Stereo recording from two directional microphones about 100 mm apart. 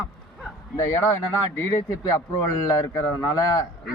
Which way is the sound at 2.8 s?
35° left (ahead or behind).